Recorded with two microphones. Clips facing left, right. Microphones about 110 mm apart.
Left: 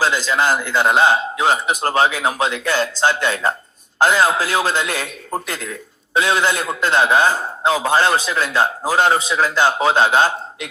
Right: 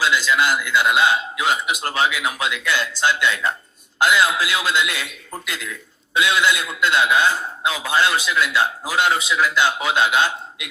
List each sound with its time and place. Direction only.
0.0 s a man's voice: 40° left (ahead or behind)